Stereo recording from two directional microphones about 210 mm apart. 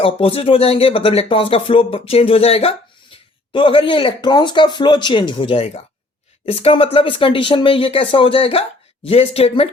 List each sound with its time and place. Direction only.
0.0 s speech: 25° left (ahead or behind)